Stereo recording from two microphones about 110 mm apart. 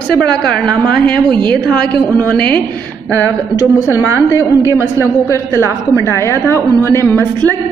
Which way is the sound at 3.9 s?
20° right (ahead or behind).